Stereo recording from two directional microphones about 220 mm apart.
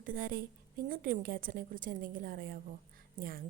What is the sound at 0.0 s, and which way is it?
A woman's voice, 40° right (ahead or behind).